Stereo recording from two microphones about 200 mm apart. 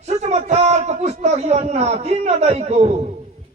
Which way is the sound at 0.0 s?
35° right (ahead or behind).